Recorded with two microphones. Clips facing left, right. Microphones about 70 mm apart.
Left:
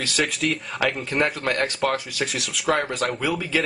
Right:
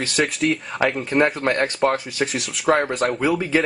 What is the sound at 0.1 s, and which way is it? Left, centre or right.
Speech, centre.